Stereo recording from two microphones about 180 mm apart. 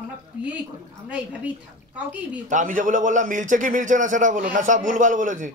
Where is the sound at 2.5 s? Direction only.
45° right (ahead or behind).